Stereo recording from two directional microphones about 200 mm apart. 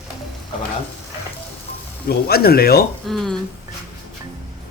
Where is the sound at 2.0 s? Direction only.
50° left (ahead or behind).